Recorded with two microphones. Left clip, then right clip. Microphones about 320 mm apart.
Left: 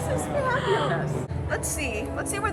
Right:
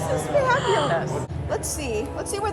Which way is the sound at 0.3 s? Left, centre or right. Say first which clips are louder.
Right 6 dB; right.